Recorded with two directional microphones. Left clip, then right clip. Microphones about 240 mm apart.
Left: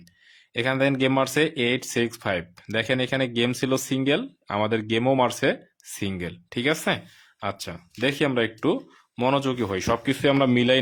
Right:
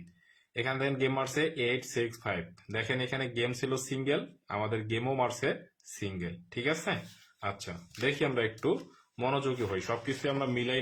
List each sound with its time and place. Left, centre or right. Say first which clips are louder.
0.5 s speech: left 9 dB; left